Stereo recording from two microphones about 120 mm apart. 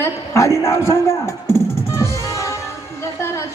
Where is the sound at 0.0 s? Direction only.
25° left (ahead or behind).